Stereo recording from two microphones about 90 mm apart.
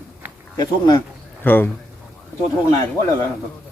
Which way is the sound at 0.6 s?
50° left (ahead or behind).